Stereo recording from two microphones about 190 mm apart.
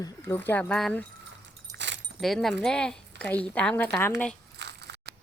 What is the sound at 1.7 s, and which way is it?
Keys jangling, 70° right (ahead or behind).